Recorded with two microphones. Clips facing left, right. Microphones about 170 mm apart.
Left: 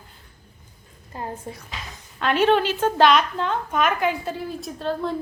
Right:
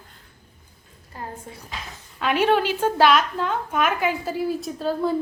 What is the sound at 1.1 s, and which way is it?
Speech, 20° left (ahead or behind).